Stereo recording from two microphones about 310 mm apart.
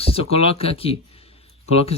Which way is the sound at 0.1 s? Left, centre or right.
Centre.